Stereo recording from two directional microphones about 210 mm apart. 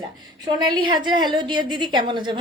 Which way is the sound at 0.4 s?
20° right (ahead or behind).